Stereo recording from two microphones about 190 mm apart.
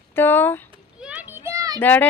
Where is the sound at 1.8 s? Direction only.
10° left (ahead or behind).